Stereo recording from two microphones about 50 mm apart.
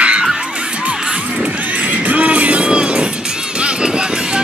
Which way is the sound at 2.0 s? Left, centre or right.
Right.